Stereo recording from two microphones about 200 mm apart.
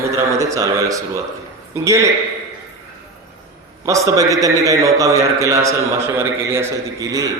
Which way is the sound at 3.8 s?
15° right (ahead or behind).